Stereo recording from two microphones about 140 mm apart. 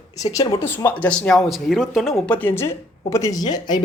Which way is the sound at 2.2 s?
15° left (ahead or behind).